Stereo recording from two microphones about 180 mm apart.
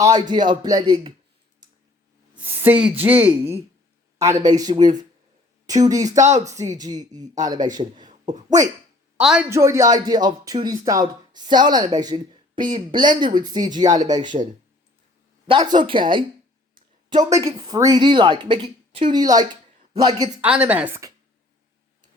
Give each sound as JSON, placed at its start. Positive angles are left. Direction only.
{"t": 0.0, "sound": "speech", "side_deg": -20}
{"t": 2.3, "sound": "speech", "side_deg": -10}
{"t": 6.2, "sound": "speech", "side_deg": -40}
{"t": 6.5, "sound": "speech", "side_deg": -20}
{"t": 9.2, "sound": "a man's voice", "side_deg": -5}
{"t": 9.5, "sound": "speech", "side_deg": -15}
{"t": 15.4, "sound": "speech", "side_deg": -25}
{"t": 16.7, "sound": "a sound", "side_deg": -25}
{"t": 17.6, "sound": "speech", "side_deg": -20}
{"t": 20.4, "sound": "speech", "side_deg": -10}